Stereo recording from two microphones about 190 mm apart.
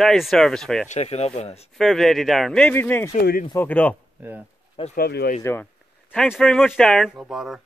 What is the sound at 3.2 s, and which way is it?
Speech, 50° left (ahead or behind).